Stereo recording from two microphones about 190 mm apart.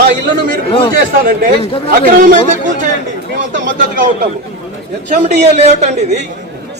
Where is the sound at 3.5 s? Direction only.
45° right (ahead or behind).